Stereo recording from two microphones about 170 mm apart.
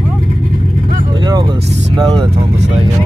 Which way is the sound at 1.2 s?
25° right (ahead or behind).